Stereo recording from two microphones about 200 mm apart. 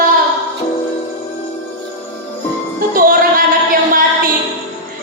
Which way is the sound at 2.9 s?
45° right (ahead or behind).